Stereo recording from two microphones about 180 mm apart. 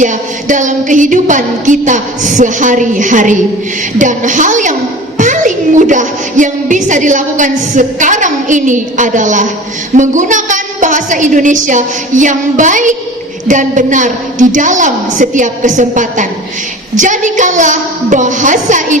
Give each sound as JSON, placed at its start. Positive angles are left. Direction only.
{"t": 0.0, "sound": "music", "side_deg": -45}